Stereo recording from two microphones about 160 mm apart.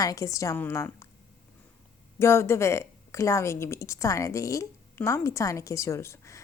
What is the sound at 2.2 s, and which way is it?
A woman's voice, 15° left (ahead or behind).